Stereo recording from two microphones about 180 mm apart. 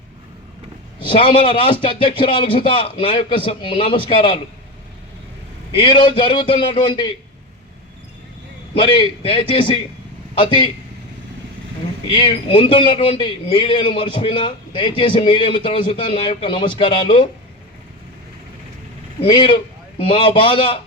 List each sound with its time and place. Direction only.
1.0 s a man's voice: 30° left (ahead or behind)
5.7 s a man's voice: 25° left (ahead or behind)
8.7 s a man's voice: 30° left (ahead or behind)
12.1 s a man's voice: 30° left (ahead or behind)
19.3 s a man's voice: 25° left (ahead or behind)